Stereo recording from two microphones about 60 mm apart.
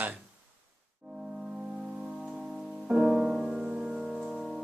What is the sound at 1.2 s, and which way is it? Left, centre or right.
Music, centre.